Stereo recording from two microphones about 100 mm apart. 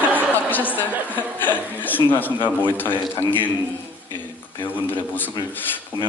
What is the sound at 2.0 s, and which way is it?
Speech, 20° left (ahead or behind).